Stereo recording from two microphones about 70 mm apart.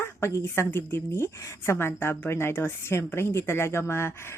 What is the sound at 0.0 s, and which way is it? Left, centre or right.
Speech, left.